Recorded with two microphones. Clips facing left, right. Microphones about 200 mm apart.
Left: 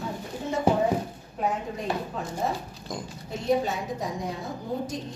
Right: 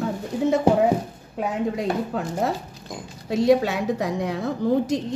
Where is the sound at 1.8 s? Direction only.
85° right.